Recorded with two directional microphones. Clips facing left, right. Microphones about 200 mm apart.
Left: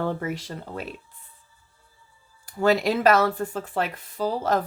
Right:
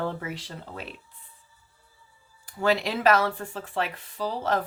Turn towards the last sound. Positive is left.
turn(degrees=45)  # may be behind; listen again after turning